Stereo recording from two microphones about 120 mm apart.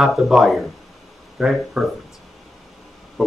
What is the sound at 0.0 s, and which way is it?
Speech, centre (ahead or behind).